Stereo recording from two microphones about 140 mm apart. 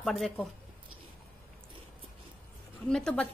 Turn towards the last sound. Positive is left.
turn(degrees=5)  # may be behind; listen again after turning